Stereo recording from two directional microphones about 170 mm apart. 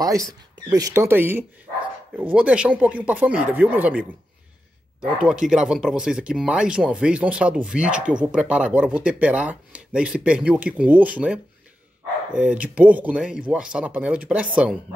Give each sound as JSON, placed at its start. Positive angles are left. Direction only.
{"t": 0.0, "sound": "speech", "side_deg": -20}
{"t": 5.5, "sound": "speech", "side_deg": -5}